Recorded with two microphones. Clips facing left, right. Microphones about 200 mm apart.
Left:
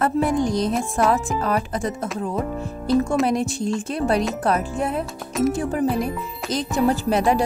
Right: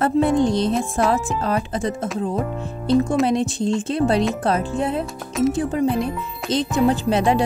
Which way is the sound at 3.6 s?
25° right (ahead or behind).